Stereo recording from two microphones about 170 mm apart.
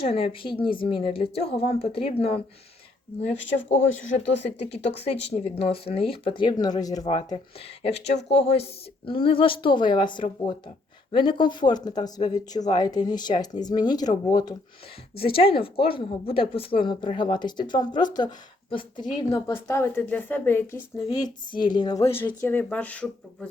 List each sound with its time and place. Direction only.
0.0 s speech: 35° left (ahead or behind)
4.0 s speech: 45° left (ahead or behind)
4.3 s speech: 90° left
4.7 s speech: 35° left (ahead or behind); by 20.7 s 10° left (ahead or behind)
21.1 s speech: 25° left (ahead or behind)